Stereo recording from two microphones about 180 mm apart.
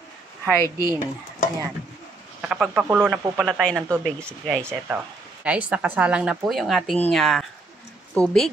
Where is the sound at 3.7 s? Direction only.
15° right (ahead or behind).